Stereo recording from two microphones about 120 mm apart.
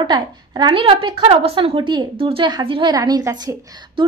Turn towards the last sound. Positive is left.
turn(degrees=-35)  # may be behind; listen again after turning